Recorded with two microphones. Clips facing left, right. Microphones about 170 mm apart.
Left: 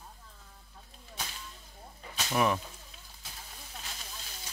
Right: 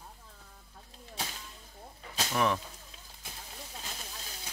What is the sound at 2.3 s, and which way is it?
Speech, 10° left (ahead or behind).